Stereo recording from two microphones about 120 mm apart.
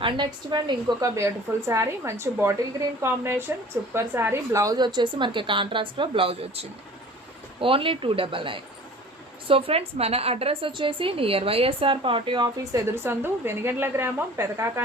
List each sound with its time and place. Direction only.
0.0 s a woman's voice: 40° right (ahead or behind)
12.7 s a woman's voice: 20° right (ahead or behind)